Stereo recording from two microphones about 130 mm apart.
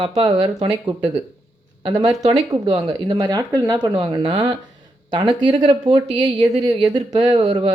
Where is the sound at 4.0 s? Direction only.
35° right (ahead or behind).